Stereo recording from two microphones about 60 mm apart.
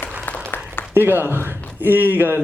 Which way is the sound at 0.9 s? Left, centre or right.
Right.